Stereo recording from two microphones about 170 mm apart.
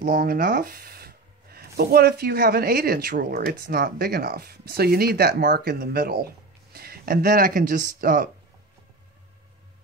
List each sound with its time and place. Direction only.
0.0 s speech: 60° right (ahead or behind)